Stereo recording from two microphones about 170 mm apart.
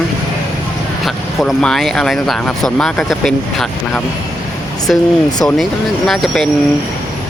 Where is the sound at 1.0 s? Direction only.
Centre (ahead or behind).